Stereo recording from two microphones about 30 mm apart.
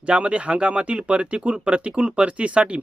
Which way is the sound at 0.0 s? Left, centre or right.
Right.